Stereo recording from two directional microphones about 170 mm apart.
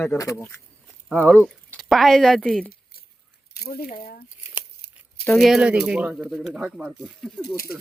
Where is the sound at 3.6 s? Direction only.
65° left (ahead or behind).